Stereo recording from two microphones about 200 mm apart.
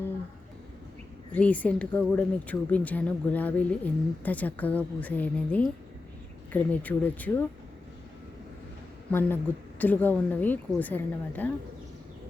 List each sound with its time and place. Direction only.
1.3 s speech: 5° left (ahead or behind)
9.1 s speech: 10° left (ahead or behind)